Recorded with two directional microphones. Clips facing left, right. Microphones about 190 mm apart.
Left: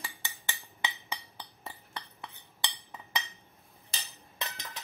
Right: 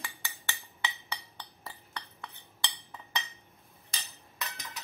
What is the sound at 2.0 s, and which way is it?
Cutlery, 25° left (ahead or behind).